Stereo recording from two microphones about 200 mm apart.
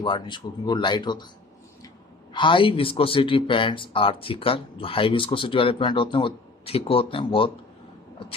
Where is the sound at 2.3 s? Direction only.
25° left (ahead or behind).